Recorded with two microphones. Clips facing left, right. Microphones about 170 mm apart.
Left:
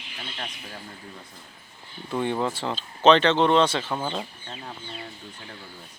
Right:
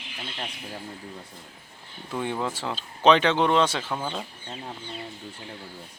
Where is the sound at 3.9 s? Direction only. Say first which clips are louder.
Left 2 dB; 10° left (ahead or behind).